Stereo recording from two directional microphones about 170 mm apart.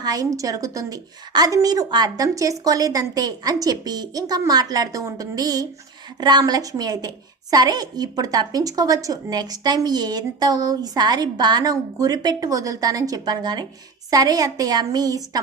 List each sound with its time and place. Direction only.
0.0 s a woman's voice: 20° right (ahead or behind)